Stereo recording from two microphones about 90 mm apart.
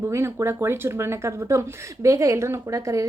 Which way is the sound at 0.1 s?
30° right (ahead or behind).